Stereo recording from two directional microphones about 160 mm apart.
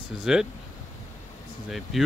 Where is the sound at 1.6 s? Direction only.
Centre (ahead or behind).